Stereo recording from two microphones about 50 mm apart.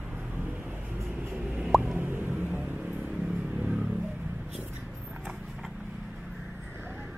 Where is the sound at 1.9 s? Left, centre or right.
Right.